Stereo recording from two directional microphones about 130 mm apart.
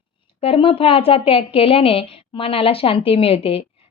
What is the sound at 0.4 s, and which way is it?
A woman's voice, 45° left (ahead or behind).